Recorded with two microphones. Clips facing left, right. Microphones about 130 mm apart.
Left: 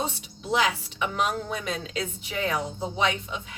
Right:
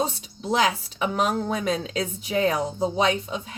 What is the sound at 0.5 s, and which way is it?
A woman's voice, 40° right (ahead or behind).